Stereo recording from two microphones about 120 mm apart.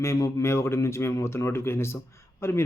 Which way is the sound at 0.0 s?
25° left (ahead or behind).